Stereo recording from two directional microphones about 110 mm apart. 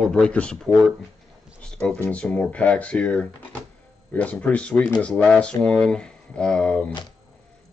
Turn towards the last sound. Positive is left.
turn(degrees=10)  # may be behind; listen again after turning